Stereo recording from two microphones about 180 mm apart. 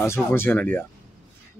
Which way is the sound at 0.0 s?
15° left (ahead or behind).